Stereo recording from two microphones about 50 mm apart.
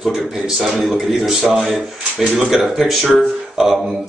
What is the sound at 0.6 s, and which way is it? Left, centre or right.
A man's voice, centre.